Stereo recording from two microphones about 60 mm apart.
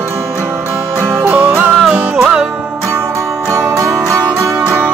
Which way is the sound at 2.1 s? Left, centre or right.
Centre.